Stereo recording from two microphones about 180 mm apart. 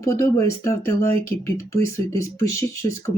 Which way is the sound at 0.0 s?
15° left (ahead or behind).